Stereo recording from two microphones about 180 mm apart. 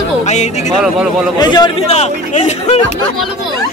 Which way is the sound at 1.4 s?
25° left (ahead or behind).